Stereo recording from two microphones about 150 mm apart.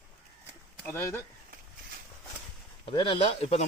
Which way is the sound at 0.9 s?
15° left (ahead or behind).